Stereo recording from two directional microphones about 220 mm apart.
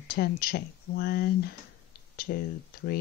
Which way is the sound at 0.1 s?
45° left (ahead or behind).